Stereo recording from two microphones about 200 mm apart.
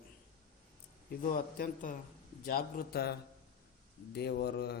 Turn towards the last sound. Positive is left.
turn(degrees=55)  # may be behind; listen again after turning